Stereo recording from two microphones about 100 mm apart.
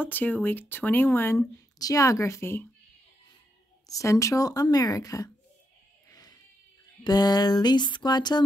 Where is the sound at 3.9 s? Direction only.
30° left (ahead or behind).